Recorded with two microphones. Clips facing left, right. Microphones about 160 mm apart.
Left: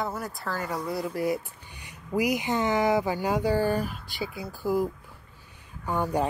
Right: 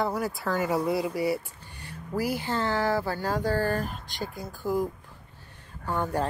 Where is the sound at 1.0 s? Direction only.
5° right (ahead or behind).